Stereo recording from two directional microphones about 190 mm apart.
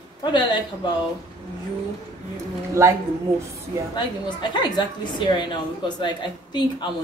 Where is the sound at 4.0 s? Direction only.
25° left (ahead or behind).